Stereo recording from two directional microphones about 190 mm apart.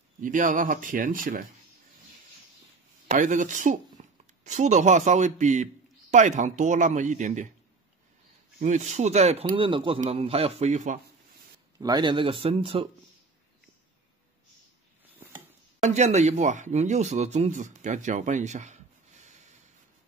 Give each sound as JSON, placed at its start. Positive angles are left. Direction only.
{"t": 0.2, "sound": "speech", "side_deg": -45}
{"t": 3.1, "sound": "speech", "side_deg": -40}
{"t": 8.5, "sound": "speech", "side_deg": -40}
{"t": 11.8, "sound": "speech", "side_deg": -25}
{"t": 15.8, "sound": "speech", "side_deg": -35}